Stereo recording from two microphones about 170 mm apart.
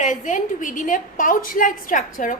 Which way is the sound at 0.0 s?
45° left (ahead or behind).